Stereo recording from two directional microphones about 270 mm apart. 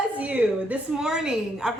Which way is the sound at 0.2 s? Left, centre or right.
Centre.